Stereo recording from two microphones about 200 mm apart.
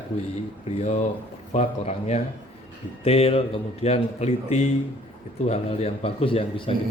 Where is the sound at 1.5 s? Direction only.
35° left (ahead or behind).